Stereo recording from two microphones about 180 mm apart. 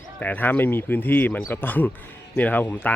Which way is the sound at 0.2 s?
10° left (ahead or behind).